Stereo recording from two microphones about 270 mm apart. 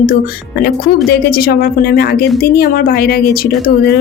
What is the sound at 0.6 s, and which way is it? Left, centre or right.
A woman's voice, left.